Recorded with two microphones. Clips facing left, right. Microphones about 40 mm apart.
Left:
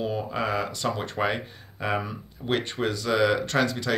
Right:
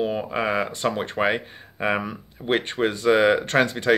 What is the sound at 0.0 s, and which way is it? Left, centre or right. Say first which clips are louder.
Speech: right 4 dB; right.